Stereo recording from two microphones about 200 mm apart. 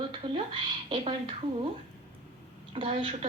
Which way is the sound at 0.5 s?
25° right (ahead or behind).